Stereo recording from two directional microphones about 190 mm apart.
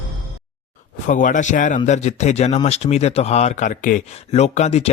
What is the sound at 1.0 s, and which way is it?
Speech, 40° left (ahead or behind).